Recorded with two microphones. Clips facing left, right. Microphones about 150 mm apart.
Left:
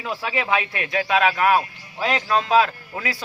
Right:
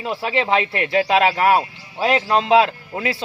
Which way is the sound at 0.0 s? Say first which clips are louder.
Right 4 dB; 25° right (ahead or behind).